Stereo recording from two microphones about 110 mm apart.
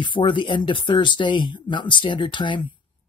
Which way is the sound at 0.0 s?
50° left (ahead or behind).